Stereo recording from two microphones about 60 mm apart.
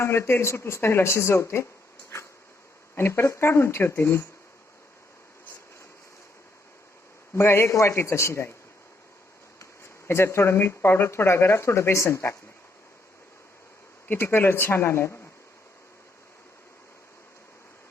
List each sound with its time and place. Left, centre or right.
0.0 s speech: left
2.1 s a sound: left
2.9 s speech: left
7.3 s speech: left
9.6 s speech: left
14.1 s speech: left